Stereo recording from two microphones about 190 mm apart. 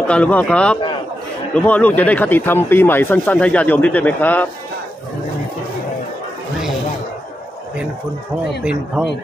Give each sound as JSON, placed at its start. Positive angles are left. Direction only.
{"t": 0.1, "sound": "speech", "side_deg": 5}
{"t": 8.6, "sound": "speech", "side_deg": -5}